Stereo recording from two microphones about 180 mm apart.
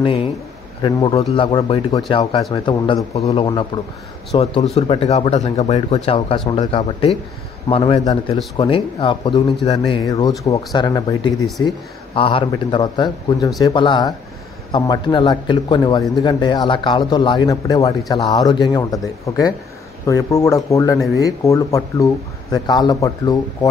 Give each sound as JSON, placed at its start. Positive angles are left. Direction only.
{"t": 0.0, "sound": "speech", "side_deg": 30}
{"t": 10.0, "sound": "speech", "side_deg": 20}